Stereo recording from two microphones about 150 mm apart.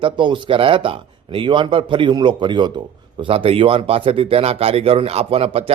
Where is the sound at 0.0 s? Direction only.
30° right (ahead or behind).